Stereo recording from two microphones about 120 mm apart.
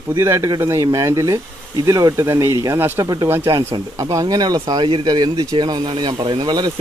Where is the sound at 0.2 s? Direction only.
25° right (ahead or behind).